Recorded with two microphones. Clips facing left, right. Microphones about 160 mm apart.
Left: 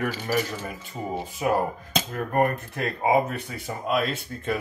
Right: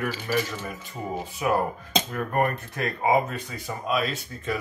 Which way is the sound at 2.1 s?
35° left (ahead or behind).